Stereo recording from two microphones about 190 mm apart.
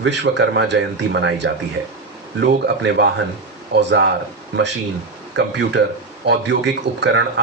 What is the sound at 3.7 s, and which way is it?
Speech, 65° right (ahead or behind).